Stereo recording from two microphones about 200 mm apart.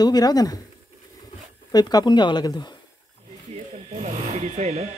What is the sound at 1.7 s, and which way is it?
Speech, 20° left (ahead or behind).